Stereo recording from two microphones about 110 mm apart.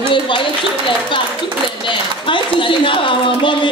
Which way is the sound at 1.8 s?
50° left (ahead or behind).